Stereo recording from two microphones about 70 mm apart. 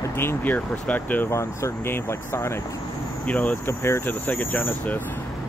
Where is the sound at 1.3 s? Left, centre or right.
Left.